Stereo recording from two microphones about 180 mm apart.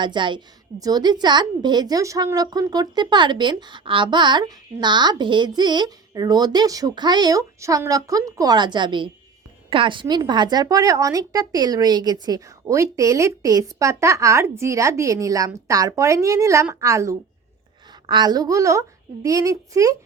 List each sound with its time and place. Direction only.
0.0 s a woman's voice: 25° right (ahead or behind)